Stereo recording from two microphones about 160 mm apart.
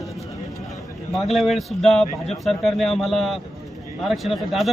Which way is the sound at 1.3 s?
Centre (ahead or behind).